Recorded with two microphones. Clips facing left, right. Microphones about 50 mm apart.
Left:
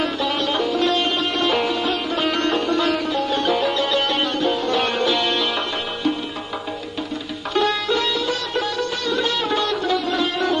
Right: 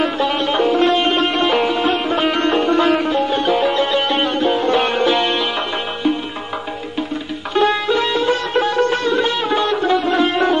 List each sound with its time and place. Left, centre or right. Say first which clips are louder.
0.0 s sitar: right 4 dB; right
1.8 s music: right 5 dB; right
7.5 s sitar: right 4 dB; right